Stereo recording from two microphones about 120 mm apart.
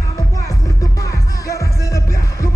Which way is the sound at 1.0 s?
25° left (ahead or behind).